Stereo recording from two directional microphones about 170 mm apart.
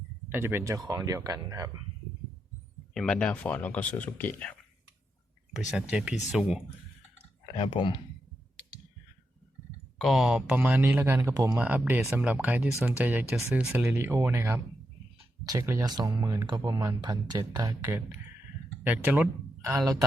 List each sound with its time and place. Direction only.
0.3 s speech: 15° right (ahead or behind)
2.9 s speech: 5° left (ahead or behind)
5.5 s speech: 5° right (ahead or behind)
7.5 s speech: 30° left (ahead or behind)
10.0 s speech: centre (ahead or behind); by 17.7 s 25° right (ahead or behind)
17.8 s a man's voice: 15° right (ahead or behind)